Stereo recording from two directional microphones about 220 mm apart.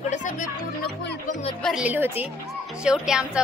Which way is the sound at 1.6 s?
Centre (ahead or behind).